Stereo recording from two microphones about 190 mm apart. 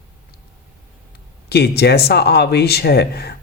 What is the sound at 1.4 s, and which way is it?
Speech, 60° left (ahead or behind).